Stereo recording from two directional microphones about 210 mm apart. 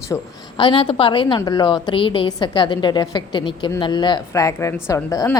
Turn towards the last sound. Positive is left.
turn(degrees=15)  # may be behind; listen again after turning